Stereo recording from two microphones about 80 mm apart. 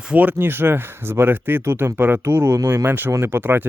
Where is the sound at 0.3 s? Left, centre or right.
Right.